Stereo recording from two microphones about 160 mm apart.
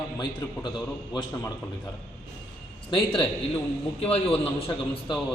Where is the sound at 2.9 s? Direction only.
30° left (ahead or behind).